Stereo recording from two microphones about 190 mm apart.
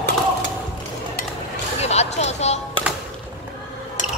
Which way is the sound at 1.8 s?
35° left (ahead or behind).